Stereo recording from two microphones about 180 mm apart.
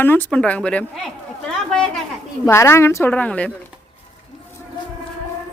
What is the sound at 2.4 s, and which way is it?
A man's voice, 15° left (ahead or behind).